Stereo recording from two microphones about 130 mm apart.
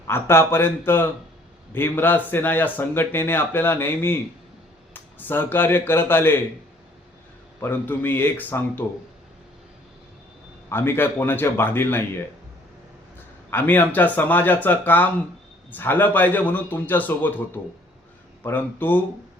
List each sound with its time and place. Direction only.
0.1 s speech: 20° left (ahead or behind)
7.6 s speech: 15° left (ahead or behind)
10.7 s speech: 15° left (ahead or behind)
13.5 s speech: 15° left (ahead or behind)